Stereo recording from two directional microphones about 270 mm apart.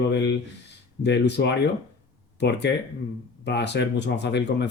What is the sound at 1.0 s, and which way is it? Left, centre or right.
Speech, left.